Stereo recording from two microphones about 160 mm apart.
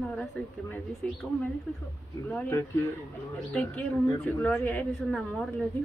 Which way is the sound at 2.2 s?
15° left (ahead or behind).